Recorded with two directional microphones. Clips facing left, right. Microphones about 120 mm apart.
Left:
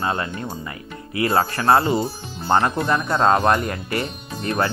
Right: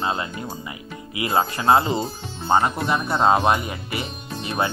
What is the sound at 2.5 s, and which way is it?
Speech, centre (ahead or behind).